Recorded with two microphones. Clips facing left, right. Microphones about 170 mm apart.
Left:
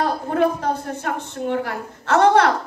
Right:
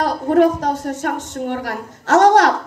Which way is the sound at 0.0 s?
75° right (ahead or behind).